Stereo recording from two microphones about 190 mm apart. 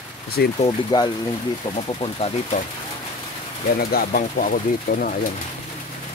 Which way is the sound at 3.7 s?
50° left (ahead or behind).